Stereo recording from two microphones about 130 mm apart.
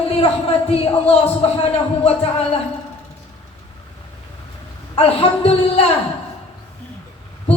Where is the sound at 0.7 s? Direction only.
50° left (ahead or behind).